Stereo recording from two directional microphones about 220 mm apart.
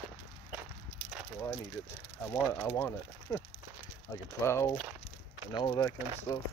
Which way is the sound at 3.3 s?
15° left (ahead or behind).